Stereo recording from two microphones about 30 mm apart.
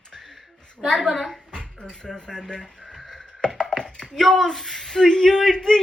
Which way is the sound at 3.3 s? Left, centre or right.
Left.